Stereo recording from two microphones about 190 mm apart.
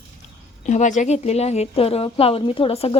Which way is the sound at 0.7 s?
40° left (ahead or behind).